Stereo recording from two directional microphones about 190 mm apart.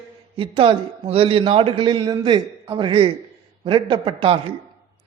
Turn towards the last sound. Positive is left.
turn(degrees=-30)  # may be behind; listen again after turning